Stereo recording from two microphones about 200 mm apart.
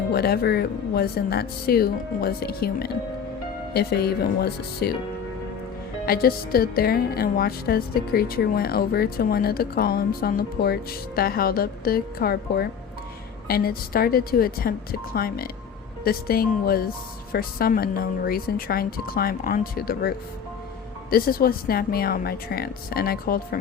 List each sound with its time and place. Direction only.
0.1 s speech: 50° left (ahead or behind)
6.1 s speech: 50° left (ahead or behind)